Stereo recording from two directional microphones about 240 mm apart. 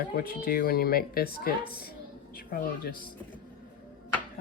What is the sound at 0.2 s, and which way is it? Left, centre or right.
Speech, left.